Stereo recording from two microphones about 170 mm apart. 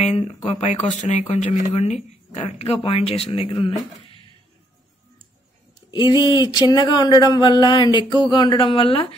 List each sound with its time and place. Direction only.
0.0 s speech: 35° left (ahead or behind)
5.9 s speech: 25° left (ahead or behind)